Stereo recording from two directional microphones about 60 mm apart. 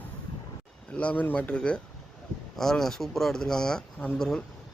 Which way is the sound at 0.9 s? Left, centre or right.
Left.